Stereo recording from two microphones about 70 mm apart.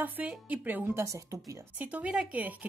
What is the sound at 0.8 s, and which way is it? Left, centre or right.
Speech, right.